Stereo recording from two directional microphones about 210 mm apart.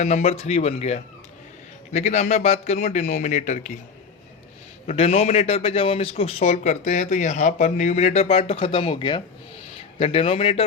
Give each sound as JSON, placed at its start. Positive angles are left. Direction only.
{"t": 0.0, "sound": "a man's voice", "side_deg": 30}
{"t": 4.9, "sound": "a man's voice", "side_deg": 30}